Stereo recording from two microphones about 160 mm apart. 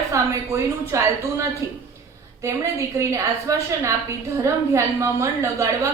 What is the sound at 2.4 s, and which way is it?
A woman's voice, 20° right (ahead or behind).